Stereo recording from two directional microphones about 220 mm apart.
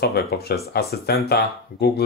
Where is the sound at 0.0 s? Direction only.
45° left (ahead or behind).